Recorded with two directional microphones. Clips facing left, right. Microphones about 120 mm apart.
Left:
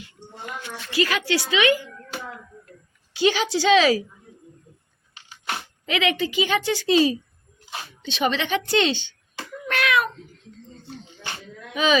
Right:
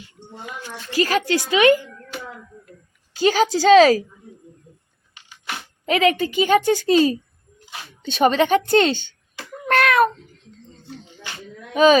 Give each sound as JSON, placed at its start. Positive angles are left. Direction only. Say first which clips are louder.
{"t": 0.9, "sound": "a woman's voice", "louder": "right 3 dB", "side_deg": -40}
{"t": 3.1, "sound": "a woman's voice", "louder": "right 3 dB", "side_deg": -40}
{"t": 5.9, "sound": "a woman's voice", "louder": "right 5 dB", "side_deg": -45}
{"t": 9.6, "sound": "cat", "louder": "right 6 dB", "side_deg": -45}
{"t": 11.7, "sound": "speech", "louder": "right 8 dB", "side_deg": -45}